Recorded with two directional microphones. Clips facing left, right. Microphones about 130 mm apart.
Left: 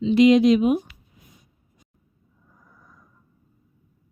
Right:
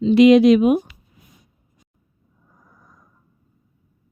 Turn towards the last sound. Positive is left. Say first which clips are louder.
# right 1 dB
turn(degrees=-40)  # may be behind; listen again after turning